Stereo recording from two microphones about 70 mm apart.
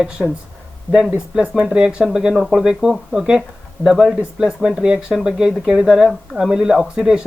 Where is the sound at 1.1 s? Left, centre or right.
Centre.